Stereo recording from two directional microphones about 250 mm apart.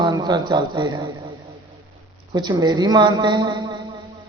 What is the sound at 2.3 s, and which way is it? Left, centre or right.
Speech, centre.